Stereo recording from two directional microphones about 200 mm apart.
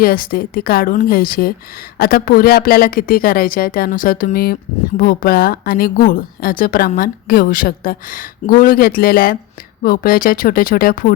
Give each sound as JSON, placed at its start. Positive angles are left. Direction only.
{"t": 0.0, "sound": "speech", "side_deg": 45}